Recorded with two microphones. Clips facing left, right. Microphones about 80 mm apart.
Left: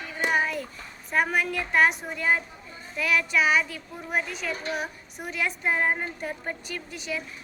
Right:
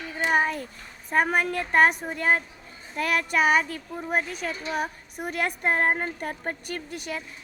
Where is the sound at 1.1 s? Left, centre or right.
Right.